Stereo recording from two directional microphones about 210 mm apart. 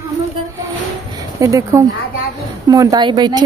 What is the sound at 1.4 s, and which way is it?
A woman's voice, 15° right (ahead or behind).